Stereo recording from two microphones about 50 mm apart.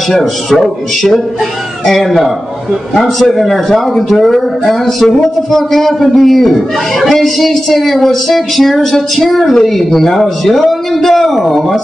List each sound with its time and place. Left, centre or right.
0.1 s a man's voice: centre
1.9 s a man's voice: centre